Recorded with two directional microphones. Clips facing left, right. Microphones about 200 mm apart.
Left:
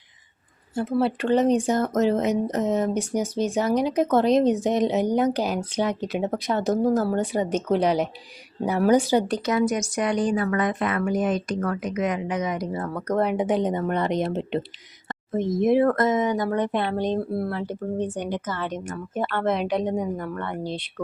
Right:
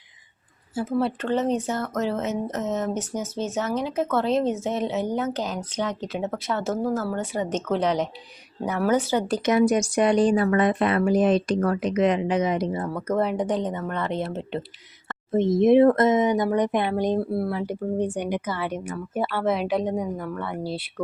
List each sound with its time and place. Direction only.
0.7 s speech: 5° right (ahead or behind)
0.9 s speech: 10° left (ahead or behind)
9.5 s speech: 30° right (ahead or behind); by 14.6 s 20° left (ahead or behind)
15.3 s speech: 25° right (ahead or behind); by 20.8 s 5° right (ahead or behind)